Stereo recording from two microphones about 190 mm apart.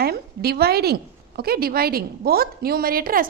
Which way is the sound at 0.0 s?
55° right (ahead or behind).